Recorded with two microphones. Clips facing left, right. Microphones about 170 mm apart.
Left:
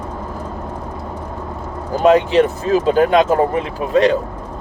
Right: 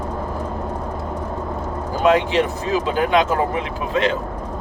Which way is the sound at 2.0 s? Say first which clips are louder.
Left 5 dB; 40° left (ahead or behind).